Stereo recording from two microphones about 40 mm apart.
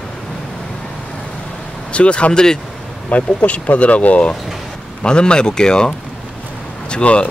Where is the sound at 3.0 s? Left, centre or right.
Left.